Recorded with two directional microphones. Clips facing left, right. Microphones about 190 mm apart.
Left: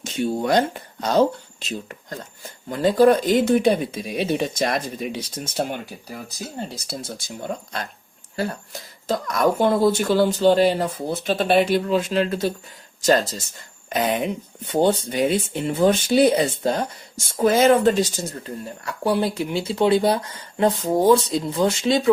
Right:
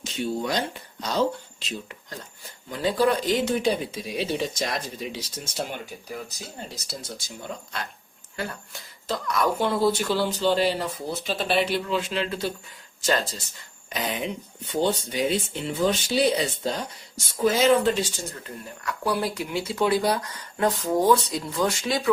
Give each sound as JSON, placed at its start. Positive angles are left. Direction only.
{"t": 0.0, "sound": "speech", "side_deg": 50}
{"t": 7.5, "sound": "speech", "side_deg": 45}
{"t": 13.9, "sound": "speech", "side_deg": 55}